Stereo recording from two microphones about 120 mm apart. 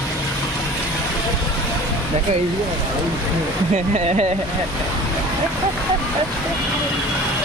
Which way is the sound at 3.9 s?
65° right (ahead or behind).